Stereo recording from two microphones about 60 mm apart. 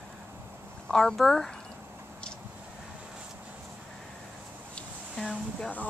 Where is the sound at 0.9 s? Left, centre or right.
Centre.